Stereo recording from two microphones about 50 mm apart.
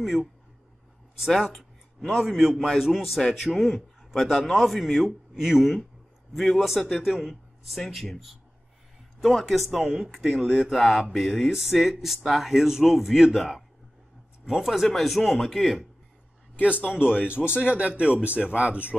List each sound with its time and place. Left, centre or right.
0.0 s a man's voice: centre
1.3 s a man's voice: centre
1.6 s a sound: centre
2.2 s a man's voice: centre
3.2 s a man's voice: centre
9.2 s a man's voice: centre
9.7 s a man's voice: centre
16.6 s speech: right